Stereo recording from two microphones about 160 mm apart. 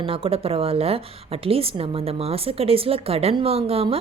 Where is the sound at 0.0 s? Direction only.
35° right (ahead or behind).